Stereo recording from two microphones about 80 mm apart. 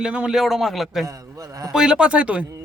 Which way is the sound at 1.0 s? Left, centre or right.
Right.